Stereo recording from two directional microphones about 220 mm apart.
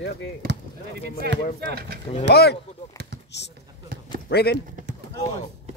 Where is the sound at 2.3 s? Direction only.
45° left (ahead or behind).